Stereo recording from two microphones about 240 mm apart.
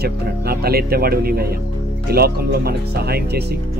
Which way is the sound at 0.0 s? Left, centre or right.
Right.